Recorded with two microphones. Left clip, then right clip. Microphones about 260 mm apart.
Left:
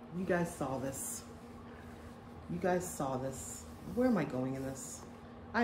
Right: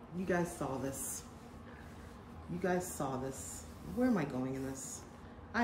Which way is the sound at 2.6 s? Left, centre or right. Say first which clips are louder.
Left 2 dB; centre.